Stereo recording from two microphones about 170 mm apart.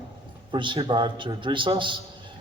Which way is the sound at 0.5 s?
30° right (ahead or behind).